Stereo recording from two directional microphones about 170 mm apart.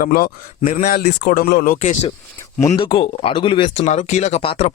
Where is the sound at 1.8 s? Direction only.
40° left (ahead or behind).